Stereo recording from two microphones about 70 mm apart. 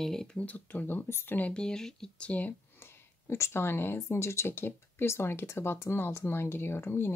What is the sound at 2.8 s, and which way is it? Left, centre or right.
Speech, left.